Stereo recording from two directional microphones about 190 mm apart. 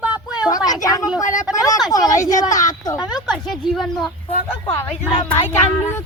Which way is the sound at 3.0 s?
5° right (ahead or behind).